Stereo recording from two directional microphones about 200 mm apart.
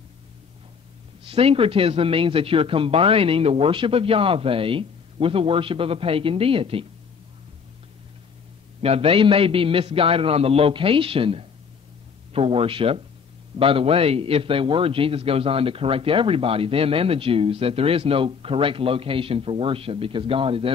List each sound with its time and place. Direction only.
1.2 s a man's voice: 30° right (ahead or behind)
8.8 s a man's voice: 30° right (ahead or behind)